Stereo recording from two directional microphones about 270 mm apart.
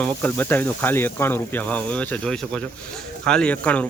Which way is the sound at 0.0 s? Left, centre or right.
Centre.